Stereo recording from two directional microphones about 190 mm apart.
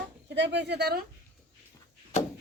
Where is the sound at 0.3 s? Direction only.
65° right (ahead or behind).